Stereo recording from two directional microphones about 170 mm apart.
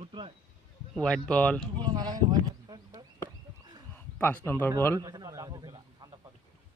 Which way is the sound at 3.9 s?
10° left (ahead or behind).